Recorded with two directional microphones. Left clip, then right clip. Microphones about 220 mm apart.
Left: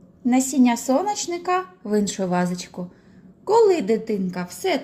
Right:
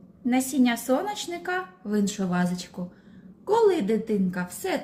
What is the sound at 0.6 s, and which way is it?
A woman's voice, 20° left (ahead or behind).